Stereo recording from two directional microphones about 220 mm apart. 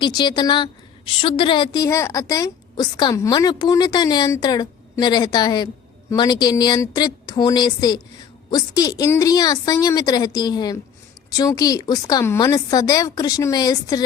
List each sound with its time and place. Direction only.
0.0 s a woman's voice: 20° left (ahead or behind)